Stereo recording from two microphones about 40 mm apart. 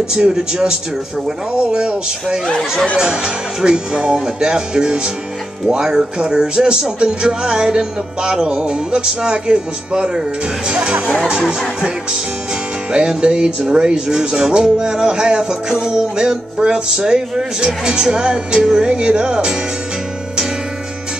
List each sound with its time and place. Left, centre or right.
0.1 s speech: centre
12.9 s speech: centre
18.0 s music: centre
18.9 s speech: right